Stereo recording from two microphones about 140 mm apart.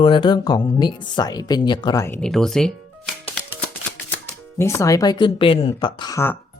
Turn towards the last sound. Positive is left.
turn(degrees=30)  # may be behind; listen again after turning